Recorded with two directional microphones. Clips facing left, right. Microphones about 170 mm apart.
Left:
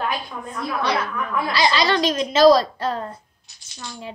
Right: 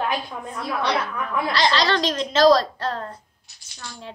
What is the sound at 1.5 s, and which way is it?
A woman's voice, 10° left (ahead or behind).